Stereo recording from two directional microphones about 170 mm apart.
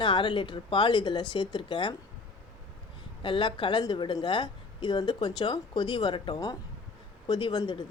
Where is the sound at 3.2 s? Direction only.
30° left (ahead or behind).